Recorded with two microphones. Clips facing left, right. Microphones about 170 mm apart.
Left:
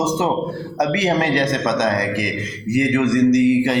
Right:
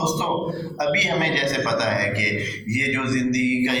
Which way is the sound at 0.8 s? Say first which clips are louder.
Left 5 dB; 55° left (ahead or behind).